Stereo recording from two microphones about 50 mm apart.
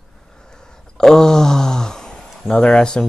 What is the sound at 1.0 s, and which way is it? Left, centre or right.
Speech, centre.